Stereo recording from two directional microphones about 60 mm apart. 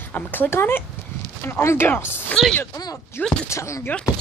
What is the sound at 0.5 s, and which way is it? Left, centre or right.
Speech, left.